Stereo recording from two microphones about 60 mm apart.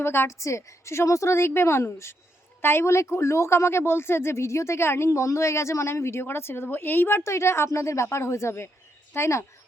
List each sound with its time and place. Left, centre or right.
0.0 s a woman's voice: left
0.3 s speech: left
7.3 s speech: left